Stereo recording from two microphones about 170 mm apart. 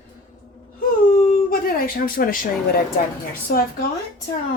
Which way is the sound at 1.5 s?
55° left (ahead or behind).